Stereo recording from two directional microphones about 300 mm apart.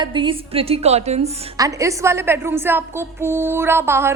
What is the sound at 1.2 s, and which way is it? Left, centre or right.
A woman's voice, centre.